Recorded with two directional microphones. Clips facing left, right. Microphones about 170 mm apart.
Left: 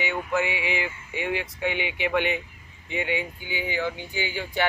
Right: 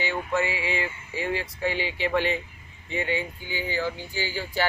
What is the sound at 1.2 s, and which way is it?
Speech, 15° left (ahead or behind).